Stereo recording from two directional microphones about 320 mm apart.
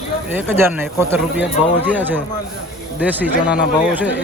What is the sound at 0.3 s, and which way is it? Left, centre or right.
Speech, centre.